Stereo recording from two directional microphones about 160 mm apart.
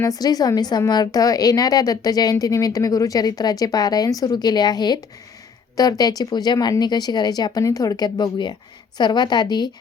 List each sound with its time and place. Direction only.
0.0 s a woman's voice: 25° left (ahead or behind)